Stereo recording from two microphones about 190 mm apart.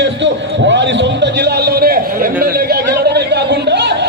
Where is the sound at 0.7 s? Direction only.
70° right (ahead or behind).